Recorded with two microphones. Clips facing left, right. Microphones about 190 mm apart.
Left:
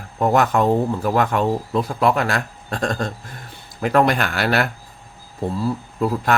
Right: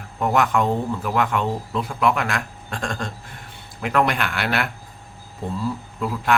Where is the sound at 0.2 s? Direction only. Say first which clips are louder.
Left 3 dB; 40° left (ahead or behind).